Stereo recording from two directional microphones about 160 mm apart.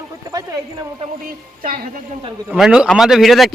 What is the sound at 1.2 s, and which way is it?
Speech, 65° right (ahead or behind).